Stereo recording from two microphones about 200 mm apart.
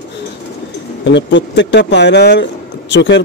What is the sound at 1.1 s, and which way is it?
Speech, 65° left (ahead or behind).